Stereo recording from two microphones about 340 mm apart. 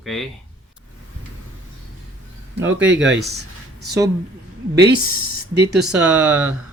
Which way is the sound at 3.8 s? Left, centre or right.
Centre.